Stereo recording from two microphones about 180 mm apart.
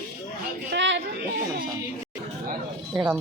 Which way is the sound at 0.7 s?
80° right.